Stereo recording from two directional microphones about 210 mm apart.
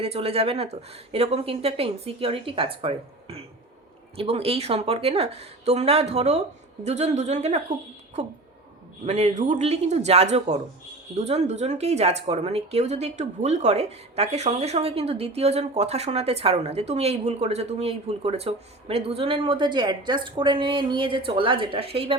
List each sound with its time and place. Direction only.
0.0 s a man's voice: 30° right (ahead or behind)